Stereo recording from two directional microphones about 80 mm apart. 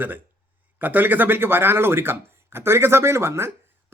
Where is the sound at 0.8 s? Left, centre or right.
Right.